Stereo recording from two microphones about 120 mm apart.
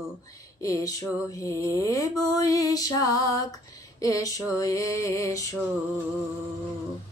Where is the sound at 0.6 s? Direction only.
30° left (ahead or behind).